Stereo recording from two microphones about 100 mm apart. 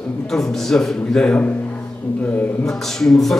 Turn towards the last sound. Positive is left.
turn(degrees=5)  # may be behind; listen again after turning